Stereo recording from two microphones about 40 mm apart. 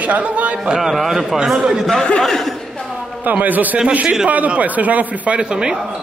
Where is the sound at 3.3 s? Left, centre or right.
Right.